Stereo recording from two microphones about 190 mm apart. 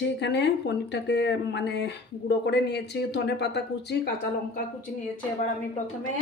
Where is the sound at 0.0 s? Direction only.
65° left (ahead or behind).